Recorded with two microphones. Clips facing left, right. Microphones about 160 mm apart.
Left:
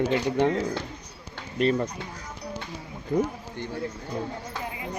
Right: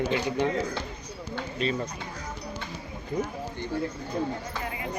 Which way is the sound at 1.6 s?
60° left (ahead or behind).